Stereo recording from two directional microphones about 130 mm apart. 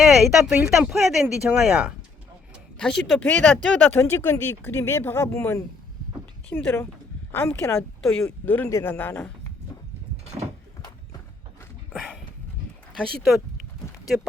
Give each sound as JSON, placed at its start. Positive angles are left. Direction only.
{"t": 0.3, "sound": "speech", "side_deg": -5}
{"t": 2.7, "sound": "speech", "side_deg": 5}
{"t": 7.8, "sound": "speech", "side_deg": 5}
{"t": 13.0, "sound": "speech", "side_deg": 0}